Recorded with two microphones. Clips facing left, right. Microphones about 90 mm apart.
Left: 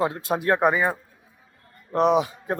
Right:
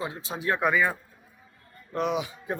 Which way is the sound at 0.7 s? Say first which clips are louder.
Left 1 dB; 30° left (ahead or behind).